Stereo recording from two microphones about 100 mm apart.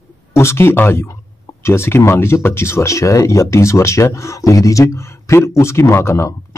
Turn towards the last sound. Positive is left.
turn(degrees=30)  # may be behind; listen again after turning